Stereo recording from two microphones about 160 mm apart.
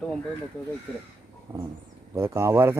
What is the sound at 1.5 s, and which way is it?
Speech, 25° right (ahead or behind).